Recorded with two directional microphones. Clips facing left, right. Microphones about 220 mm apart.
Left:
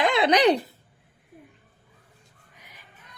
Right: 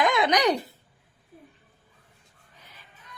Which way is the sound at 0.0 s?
30° left (ahead or behind).